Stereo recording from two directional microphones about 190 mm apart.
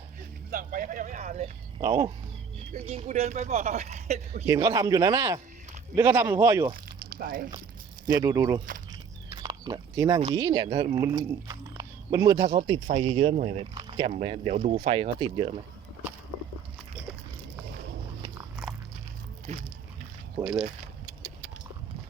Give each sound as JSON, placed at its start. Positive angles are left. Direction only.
{"t": 0.5, "sound": "a sound", "side_deg": -45}
{"t": 1.8, "sound": "a man's voice", "side_deg": -15}
{"t": 2.7, "sound": "speech", "side_deg": -35}
{"t": 4.4, "sound": "a man's voice", "side_deg": -15}
{"t": 7.1, "sound": "speech", "side_deg": -50}
{"t": 8.2, "sound": "speech", "side_deg": -20}
{"t": 8.9, "sound": "biting", "side_deg": -20}
{"t": 10.2, "sound": "speech", "side_deg": -20}
{"t": 13.7, "sound": "biting", "side_deg": -25}
{"t": 14.1, "sound": "speech", "side_deg": -35}
{"t": 18.6, "sound": "dog", "side_deg": 0}
{"t": 19.5, "sound": "a sound", "side_deg": -40}
{"t": 20.4, "sound": "speech", "side_deg": -5}